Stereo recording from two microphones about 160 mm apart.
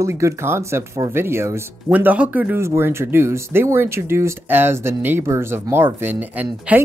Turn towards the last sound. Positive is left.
turn(degrees=-10)  # may be behind; listen again after turning